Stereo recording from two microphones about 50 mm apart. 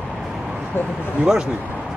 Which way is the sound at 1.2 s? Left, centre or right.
Centre.